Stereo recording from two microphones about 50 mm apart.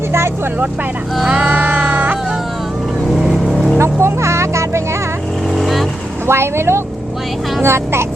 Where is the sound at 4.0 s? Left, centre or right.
Right.